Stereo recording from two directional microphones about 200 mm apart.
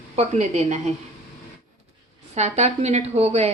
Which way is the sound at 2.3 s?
35° right (ahead or behind).